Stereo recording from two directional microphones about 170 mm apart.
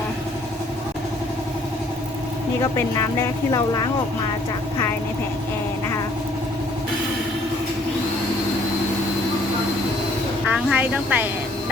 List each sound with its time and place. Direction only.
2.7 s speech: 15° left (ahead or behind)
10.4 s a woman's voice: 5° right (ahead or behind)